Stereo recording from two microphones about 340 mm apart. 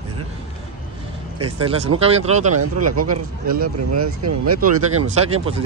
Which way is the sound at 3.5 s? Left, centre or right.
Right.